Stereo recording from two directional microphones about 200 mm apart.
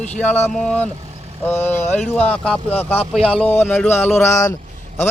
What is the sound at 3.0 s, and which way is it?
Speech, 30° left (ahead or behind).